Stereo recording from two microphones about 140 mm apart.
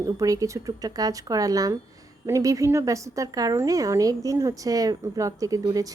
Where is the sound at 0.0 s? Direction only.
25° right (ahead or behind).